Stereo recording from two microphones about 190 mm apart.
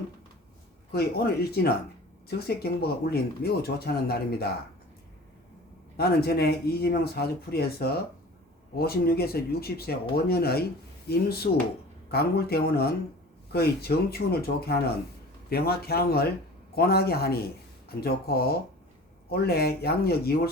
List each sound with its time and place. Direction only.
0.9 s speech: 55° left (ahead or behind)
2.8 s speech: 55° left (ahead or behind)
6.0 s speech: 55° left (ahead or behind)